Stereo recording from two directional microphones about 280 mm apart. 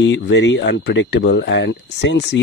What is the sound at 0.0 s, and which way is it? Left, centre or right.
Speech, left.